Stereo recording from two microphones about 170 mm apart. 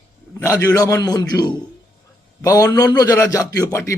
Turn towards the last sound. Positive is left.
turn(degrees=20)  # may be behind; listen again after turning